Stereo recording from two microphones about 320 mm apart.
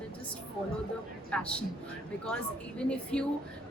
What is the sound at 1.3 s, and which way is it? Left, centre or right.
Speech, centre.